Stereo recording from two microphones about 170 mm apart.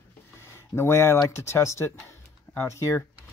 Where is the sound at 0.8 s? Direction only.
15° left (ahead or behind).